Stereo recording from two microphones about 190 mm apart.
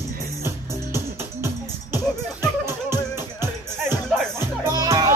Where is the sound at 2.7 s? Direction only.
15° right (ahead or behind).